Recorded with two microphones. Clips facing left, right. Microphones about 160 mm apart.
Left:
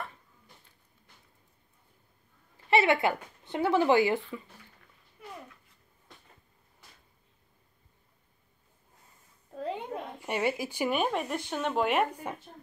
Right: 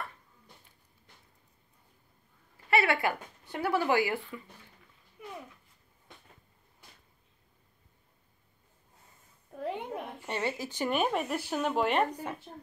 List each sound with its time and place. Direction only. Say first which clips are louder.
2.7 s speech: left 3 dB; 20° left (ahead or behind)
9.7 s a sound: even; 20° left (ahead or behind)
11.0 s speech: even; centre (ahead or behind)